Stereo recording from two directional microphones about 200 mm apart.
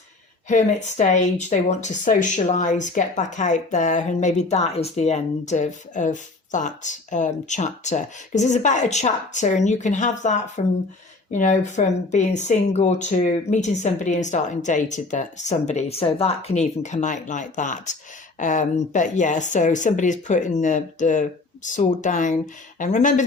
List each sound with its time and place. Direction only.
0.4 s speech: 35° left (ahead or behind)